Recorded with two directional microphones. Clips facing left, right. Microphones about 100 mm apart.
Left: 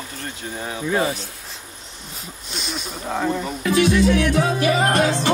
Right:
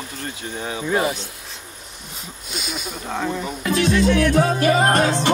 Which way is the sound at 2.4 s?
5° right (ahead or behind).